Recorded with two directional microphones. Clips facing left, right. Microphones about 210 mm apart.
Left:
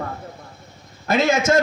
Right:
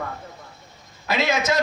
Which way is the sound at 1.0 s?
50° left (ahead or behind).